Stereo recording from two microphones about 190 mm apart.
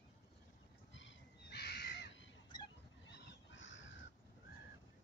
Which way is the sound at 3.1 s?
65° left (ahead or behind).